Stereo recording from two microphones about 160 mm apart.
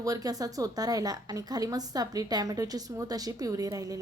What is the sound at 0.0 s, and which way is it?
A woman's voice, 20° right (ahead or behind).